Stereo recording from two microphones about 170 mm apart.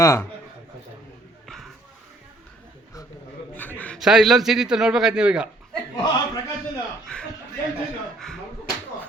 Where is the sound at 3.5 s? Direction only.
10° left (ahead or behind).